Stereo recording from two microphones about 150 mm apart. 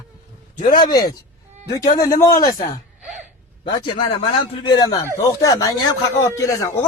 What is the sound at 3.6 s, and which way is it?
A man's voice, 35° left (ahead or behind).